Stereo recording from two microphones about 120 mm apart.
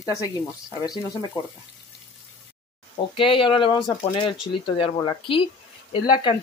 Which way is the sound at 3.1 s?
45° left (ahead or behind).